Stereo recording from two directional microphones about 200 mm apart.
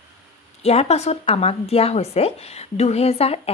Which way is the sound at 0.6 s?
30° left (ahead or behind).